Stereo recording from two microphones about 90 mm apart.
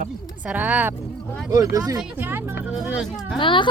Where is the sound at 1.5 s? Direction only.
40° right (ahead or behind).